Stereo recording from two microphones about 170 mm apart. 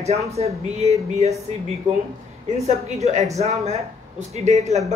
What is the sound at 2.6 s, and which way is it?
Speech, 40° right (ahead or behind).